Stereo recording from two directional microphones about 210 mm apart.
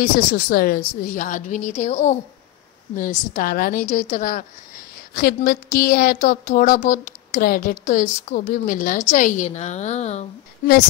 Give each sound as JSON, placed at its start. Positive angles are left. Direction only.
{"t": 0.0, "sound": "a woman's voice", "side_deg": 45}